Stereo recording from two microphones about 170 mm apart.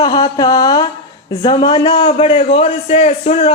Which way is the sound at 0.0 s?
25° left (ahead or behind).